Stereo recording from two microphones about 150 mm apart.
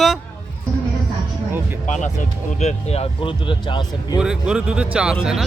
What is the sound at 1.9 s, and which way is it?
Speech, 50° left (ahead or behind).